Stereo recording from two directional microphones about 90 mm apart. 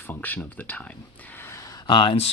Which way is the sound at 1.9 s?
65° left (ahead or behind).